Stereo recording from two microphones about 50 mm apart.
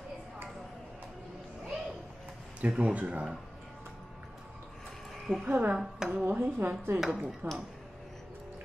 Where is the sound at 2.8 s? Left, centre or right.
Right.